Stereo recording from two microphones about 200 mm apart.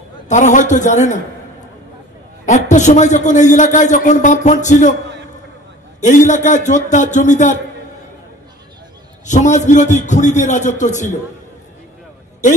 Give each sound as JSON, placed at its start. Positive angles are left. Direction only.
{"t": 0.3, "sound": "a man's voice", "side_deg": 40}
{"t": 2.4, "sound": "a man's voice", "side_deg": 35}
{"t": 6.0, "sound": "a man's voice", "side_deg": 35}
{"t": 9.2, "sound": "a man's voice", "side_deg": 40}